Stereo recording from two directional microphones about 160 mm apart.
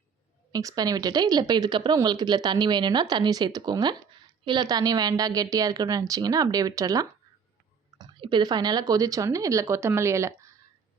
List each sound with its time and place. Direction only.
0.5 s speech: 25° right (ahead or behind)